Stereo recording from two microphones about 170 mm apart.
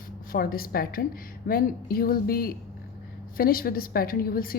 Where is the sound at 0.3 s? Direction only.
60° left (ahead or behind).